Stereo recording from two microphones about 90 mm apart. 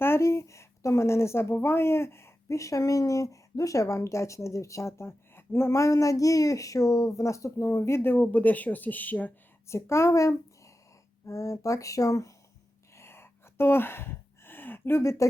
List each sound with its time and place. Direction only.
0.0 s speech: 30° left (ahead or behind)
9.6 s speech: 30° left (ahead or behind)
13.0 s a sound: 30° left (ahead or behind)